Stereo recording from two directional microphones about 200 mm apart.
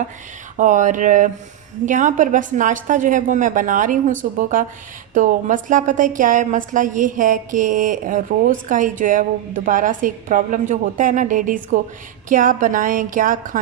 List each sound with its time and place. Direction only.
0.5 s a woman's voice: 40° right (ahead or behind)